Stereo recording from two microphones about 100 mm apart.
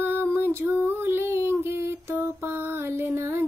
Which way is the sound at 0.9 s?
25° right (ahead or behind).